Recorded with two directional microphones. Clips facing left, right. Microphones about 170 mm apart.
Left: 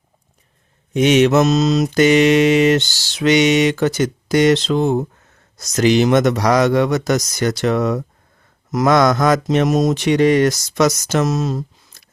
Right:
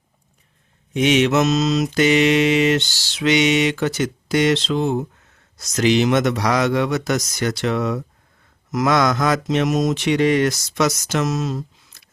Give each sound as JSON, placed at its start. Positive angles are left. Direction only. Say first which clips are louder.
{"t": 0.9, "sound": "mantra", "louder": "left 4 dB", "side_deg": 45}
{"t": 8.7, "sound": "speech", "louder": "left 4 dB", "side_deg": 40}